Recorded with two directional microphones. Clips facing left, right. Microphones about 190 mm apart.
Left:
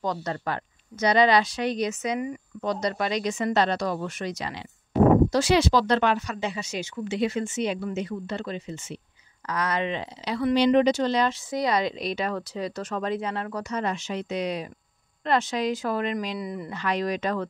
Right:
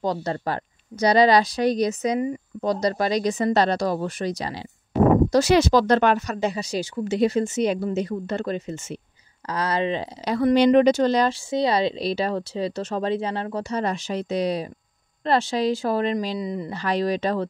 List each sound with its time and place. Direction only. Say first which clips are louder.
0.0 s a woman's voice: right 4 dB; 30° right (ahead or behind); by 9.0 s 45° right (ahead or behind)
9.5 s a woman's voice: right 3 dB; 30° right (ahead or behind)
10.2 s speech: right 4 dB; 45° right (ahead or behind)
11.5 s a woman's voice: right 5 dB; 30° right (ahead or behind)
16.7 s a woman's voice: right 3 dB; 35° right (ahead or behind)